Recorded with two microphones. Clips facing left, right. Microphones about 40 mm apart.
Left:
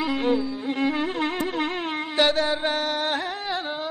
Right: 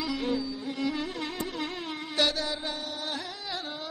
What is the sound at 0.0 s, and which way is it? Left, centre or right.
Music, left.